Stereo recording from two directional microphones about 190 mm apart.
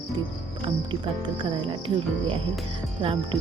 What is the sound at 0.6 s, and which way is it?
Speech, 25° right (ahead or behind).